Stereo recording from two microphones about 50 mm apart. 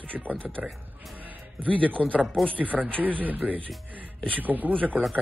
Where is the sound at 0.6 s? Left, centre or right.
Centre.